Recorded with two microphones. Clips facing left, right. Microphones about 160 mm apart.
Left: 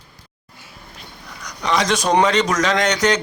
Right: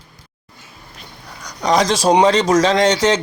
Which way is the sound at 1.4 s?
40° right (ahead or behind).